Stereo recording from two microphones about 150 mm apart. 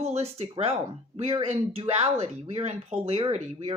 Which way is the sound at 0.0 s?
45° right (ahead or behind).